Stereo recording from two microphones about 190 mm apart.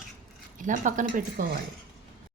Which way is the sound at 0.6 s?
45° right (ahead or behind).